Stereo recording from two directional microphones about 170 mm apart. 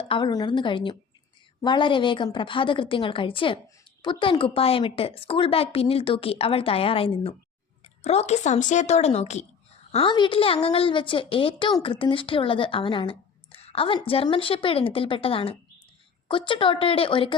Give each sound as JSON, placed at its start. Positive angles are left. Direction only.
{"t": 0.1, "sound": "a woman's voice", "side_deg": 25}
{"t": 9.9, "sound": "a woman's voice", "side_deg": 30}